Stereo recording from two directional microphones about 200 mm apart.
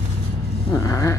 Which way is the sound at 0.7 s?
15° left (ahead or behind).